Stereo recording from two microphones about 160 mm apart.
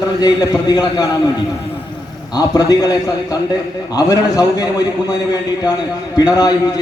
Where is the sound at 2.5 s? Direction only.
25° left (ahead or behind).